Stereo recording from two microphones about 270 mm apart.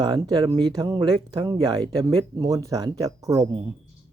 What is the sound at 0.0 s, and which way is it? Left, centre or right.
Speech, centre.